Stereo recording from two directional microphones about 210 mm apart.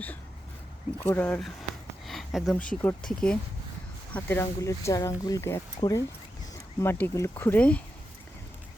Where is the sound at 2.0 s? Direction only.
Centre (ahead or behind).